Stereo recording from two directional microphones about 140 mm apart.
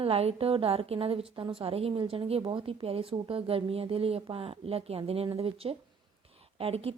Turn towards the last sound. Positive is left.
turn(degrees=-45)  # may be behind; listen again after turning